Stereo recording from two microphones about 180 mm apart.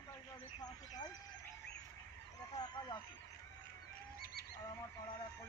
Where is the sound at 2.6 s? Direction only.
25° left (ahead or behind).